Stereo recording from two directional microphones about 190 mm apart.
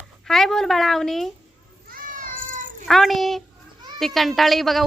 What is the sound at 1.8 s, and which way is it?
Cat, 45° right (ahead or behind).